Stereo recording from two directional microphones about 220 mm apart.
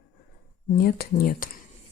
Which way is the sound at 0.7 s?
45° left (ahead or behind).